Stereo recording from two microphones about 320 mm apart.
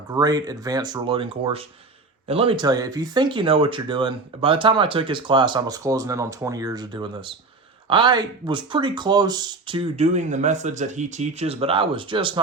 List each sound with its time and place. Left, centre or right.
0.1 s speech: centre